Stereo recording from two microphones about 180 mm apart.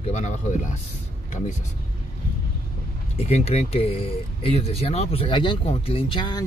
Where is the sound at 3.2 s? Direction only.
35° left (ahead or behind).